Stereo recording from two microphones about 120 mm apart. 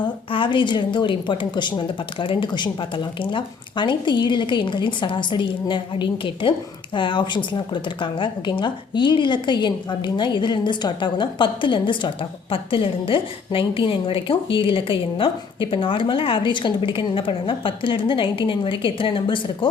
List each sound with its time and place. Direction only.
0.0 s a woman's voice: 45° left (ahead or behind)